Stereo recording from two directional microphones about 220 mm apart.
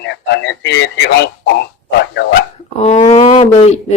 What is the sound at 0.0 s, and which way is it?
Speech, 55° left (ahead or behind).